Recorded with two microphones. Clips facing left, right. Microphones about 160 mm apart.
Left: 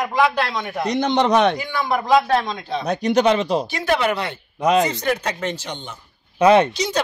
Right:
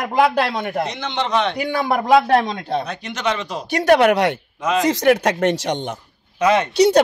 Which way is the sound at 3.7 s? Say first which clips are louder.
Right 7 dB; 65° right (ahead or behind).